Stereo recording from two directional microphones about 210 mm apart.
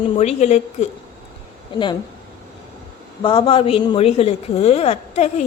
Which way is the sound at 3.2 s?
25° left (ahead or behind).